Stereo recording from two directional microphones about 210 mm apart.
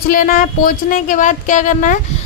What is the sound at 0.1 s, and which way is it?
A woman's voice, 40° left (ahead or behind).